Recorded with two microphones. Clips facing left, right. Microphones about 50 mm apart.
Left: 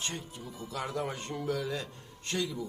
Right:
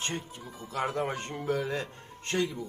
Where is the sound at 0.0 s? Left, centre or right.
Right.